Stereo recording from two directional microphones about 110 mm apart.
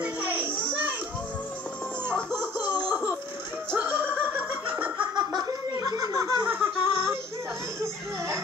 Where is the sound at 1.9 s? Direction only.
20° right (ahead or behind).